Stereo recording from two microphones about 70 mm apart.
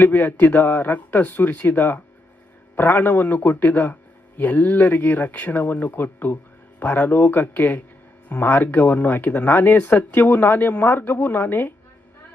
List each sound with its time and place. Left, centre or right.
0.0 s speech: left